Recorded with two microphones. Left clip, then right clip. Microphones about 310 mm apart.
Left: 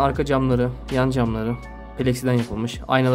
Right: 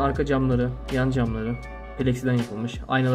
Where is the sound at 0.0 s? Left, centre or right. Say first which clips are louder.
Left 3 dB; centre.